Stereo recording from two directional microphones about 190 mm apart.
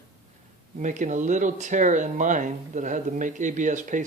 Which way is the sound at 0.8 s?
40° right (ahead or behind).